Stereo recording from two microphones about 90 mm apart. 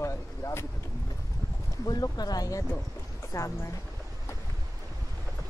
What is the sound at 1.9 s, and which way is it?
Speech, 50° left (ahead or behind).